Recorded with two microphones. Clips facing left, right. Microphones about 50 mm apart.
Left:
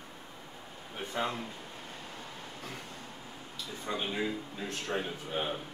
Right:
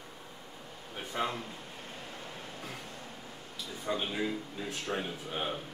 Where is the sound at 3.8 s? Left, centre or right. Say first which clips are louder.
Right 1 dB; centre.